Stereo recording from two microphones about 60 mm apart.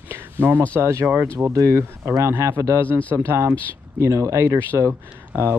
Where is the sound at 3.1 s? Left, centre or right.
Right.